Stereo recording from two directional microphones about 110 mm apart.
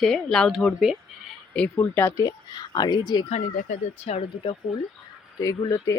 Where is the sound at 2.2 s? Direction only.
40° left (ahead or behind).